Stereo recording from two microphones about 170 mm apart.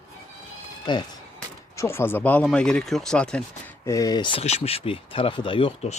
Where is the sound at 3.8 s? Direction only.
20° left (ahead or behind).